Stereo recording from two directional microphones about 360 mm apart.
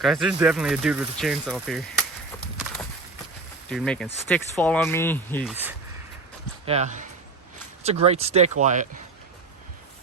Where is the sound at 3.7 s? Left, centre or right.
Centre.